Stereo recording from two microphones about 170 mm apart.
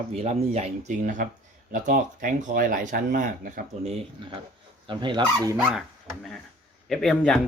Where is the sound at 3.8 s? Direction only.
35° right (ahead or behind).